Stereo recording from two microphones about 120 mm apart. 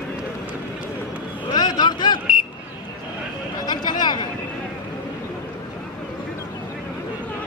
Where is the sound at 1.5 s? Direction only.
35° left (ahead or behind).